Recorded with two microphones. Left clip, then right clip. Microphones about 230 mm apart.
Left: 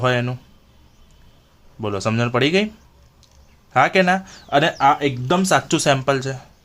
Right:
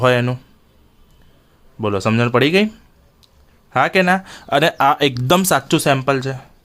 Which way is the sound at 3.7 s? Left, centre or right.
Centre.